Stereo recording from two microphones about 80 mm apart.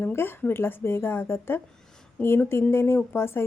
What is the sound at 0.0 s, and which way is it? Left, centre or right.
A woman's voice, left.